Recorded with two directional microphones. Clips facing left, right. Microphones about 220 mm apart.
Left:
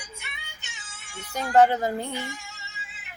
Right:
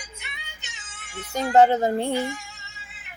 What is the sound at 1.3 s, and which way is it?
Speech, 25° right (ahead or behind).